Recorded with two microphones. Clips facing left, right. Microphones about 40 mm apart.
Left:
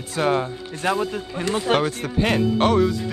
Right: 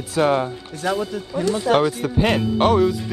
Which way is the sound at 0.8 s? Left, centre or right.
Left.